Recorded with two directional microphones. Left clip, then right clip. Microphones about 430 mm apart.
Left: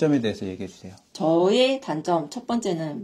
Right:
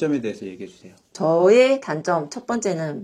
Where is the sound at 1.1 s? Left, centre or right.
Right.